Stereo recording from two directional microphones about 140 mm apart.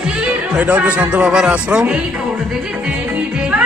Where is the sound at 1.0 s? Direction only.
5° right (ahead or behind).